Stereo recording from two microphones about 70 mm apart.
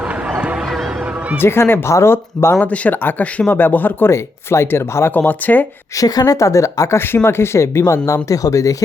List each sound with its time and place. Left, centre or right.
1.4 s speech: left
2.6 s speech: centre
4.1 s speech: left
6.0 s speech: left